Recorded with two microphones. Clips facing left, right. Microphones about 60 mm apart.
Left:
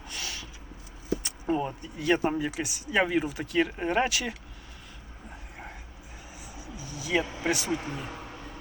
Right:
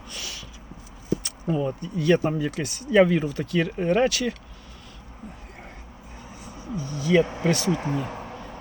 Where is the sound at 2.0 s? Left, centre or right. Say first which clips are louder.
Right 4 dB; centre.